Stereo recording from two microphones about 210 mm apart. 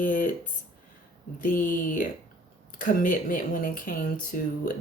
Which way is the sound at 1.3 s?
40° left (ahead or behind).